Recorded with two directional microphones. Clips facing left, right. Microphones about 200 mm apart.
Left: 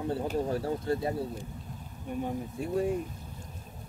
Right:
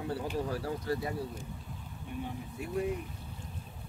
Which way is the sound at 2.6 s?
30° left (ahead or behind).